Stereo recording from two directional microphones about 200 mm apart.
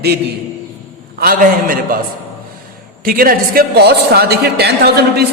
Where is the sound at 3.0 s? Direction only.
45° right (ahead or behind).